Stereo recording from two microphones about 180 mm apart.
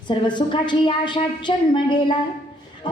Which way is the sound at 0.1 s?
25° left (ahead or behind).